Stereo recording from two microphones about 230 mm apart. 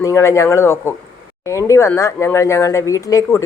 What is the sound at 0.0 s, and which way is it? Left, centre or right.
Speech, centre.